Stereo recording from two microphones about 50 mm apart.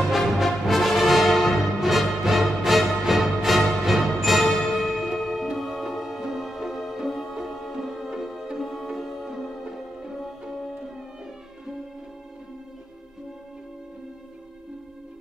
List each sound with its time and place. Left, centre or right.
0.1 s music: centre